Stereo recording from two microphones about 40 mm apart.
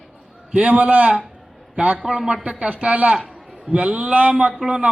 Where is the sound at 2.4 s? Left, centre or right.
Right.